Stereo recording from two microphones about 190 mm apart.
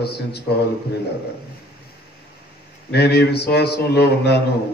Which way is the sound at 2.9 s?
60° left (ahead or behind).